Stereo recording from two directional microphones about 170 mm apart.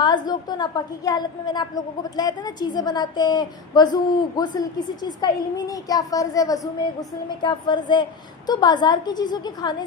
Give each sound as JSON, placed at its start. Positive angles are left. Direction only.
{"t": 0.0, "sound": "a woman's voice", "side_deg": 25}